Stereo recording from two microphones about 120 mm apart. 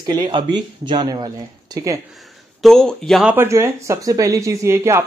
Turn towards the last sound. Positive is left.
turn(degrees=-25)  # may be behind; listen again after turning